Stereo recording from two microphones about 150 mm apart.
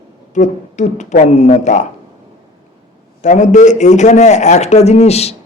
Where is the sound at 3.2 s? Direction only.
55° left (ahead or behind).